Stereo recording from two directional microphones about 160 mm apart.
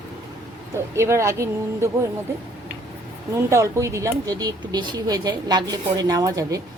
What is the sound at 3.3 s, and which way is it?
Speech, 20° right (ahead or behind).